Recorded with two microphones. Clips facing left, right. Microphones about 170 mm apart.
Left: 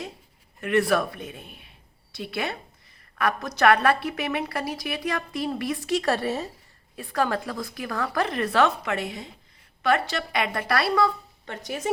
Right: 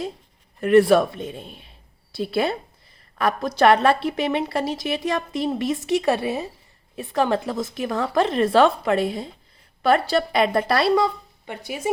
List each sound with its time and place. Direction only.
0.6 s speech: 30° right (ahead or behind); by 11.9 s 10° right (ahead or behind)